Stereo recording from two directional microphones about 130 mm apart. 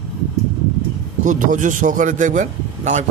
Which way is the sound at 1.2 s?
75° right (ahead or behind).